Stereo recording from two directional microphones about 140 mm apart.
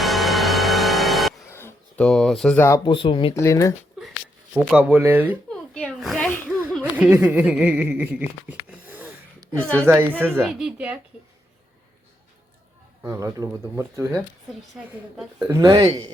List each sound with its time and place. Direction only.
0.0 s music: centre (ahead or behind)
1.5 s a sound: 20° left (ahead or behind)
2.0 s speech: 5° left (ahead or behind)
2.6 s speech: 20° left (ahead or behind)
2.8 s speech: 40° left (ahead or behind)
3.3 s speech: 20° left (ahead or behind)
4.5 s speech: 10° right (ahead or behind)
5.5 s a sound: 5° left (ahead or behind)
6.8 s speech: 10° right (ahead or behind)
10.4 s speech: 5° right (ahead or behind)
13.1 s speech: 20° right (ahead or behind)
15.1 s speech: 5° right (ahead or behind)
15.4 s speech: 25° right (ahead or behind)